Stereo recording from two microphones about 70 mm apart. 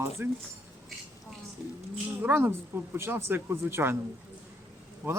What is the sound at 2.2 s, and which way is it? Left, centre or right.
Speech, right.